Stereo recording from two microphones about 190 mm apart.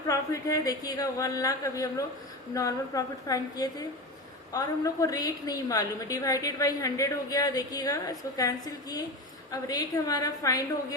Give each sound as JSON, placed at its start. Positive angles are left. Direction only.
{"t": 0.1, "sound": "a woman's voice", "side_deg": 15}